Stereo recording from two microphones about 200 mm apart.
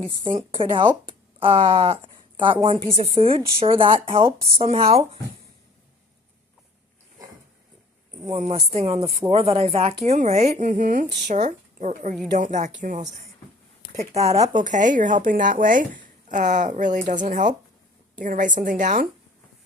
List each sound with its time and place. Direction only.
0.3 s a woman's voice: 25° right (ahead or behind)
8.3 s speech: 35° right (ahead or behind)